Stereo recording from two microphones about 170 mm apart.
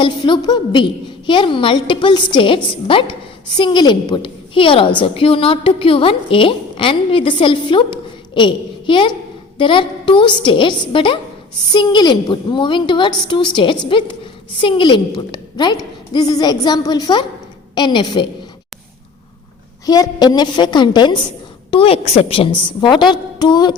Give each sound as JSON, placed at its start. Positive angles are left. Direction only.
{"t": 0.0, "sound": "a woman's voice", "side_deg": 25}
{"t": 19.8, "sound": "a woman's voice", "side_deg": 20}